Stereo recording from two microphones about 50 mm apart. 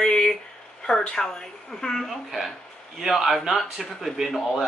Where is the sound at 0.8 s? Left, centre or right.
Centre.